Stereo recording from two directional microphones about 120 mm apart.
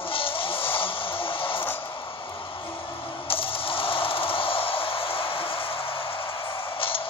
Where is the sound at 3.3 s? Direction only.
50° left (ahead or behind).